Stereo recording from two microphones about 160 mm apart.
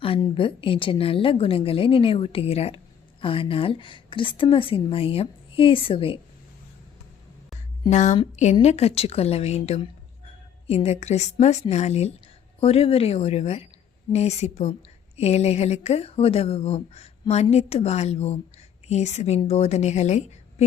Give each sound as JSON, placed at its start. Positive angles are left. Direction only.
{"t": 0.0, "sound": "a woman's voice", "side_deg": 35}
{"t": 7.9, "sound": "a woman's voice", "side_deg": 45}